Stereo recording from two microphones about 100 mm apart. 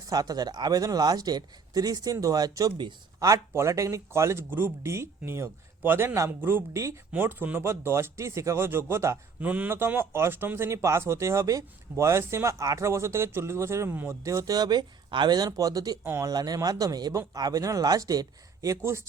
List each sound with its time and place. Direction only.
0.1 s speech: 40° right (ahead or behind)
9.4 s speech: 15° right (ahead or behind)
14.3 s speech: 35° right (ahead or behind)
16.0 s speech: 25° right (ahead or behind)
16.3 s speech: 40° right (ahead or behind)